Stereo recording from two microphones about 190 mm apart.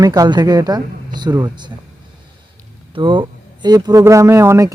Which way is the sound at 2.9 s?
25° right (ahead or behind).